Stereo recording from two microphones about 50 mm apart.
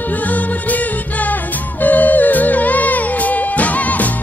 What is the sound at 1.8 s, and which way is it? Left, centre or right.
Music, left.